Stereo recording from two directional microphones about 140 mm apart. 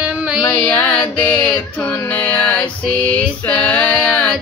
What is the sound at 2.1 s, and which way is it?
Music, 10° left (ahead or behind).